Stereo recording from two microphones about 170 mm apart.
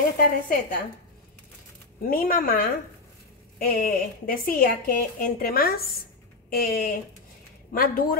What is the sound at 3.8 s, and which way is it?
Speech, 55° left (ahead or behind).